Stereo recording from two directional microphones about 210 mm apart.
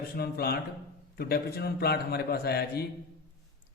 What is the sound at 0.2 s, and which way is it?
Speech, 50° left (ahead or behind).